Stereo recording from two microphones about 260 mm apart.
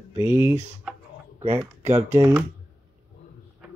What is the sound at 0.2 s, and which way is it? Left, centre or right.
Speech, centre.